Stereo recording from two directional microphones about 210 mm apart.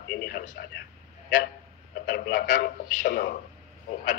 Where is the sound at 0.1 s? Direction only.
50° left (ahead or behind).